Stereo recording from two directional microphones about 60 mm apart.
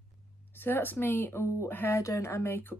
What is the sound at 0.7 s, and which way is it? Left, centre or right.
Speech, left.